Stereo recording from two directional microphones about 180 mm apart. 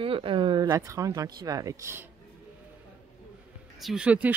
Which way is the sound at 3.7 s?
5° right (ahead or behind).